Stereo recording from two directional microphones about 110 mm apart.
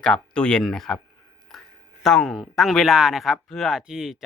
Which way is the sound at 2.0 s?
Centre (ahead or behind).